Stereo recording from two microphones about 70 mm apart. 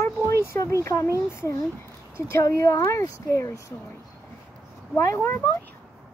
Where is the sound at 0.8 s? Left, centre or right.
Left.